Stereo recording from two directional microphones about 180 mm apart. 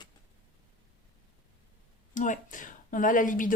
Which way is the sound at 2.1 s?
45° left (ahead or behind).